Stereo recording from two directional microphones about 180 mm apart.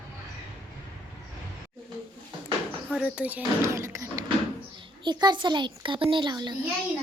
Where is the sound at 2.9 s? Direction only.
5° right (ahead or behind).